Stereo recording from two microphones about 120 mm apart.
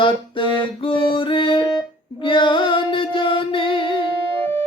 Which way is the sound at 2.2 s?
45° left (ahead or behind).